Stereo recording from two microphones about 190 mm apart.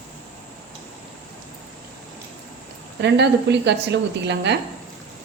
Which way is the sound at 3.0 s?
65° right (ahead or behind).